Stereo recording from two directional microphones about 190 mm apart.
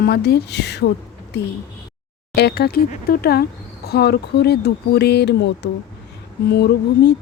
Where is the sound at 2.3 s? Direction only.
60° left (ahead or behind).